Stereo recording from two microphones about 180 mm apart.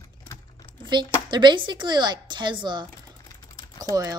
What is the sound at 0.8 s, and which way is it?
Speech, 25° right (ahead or behind).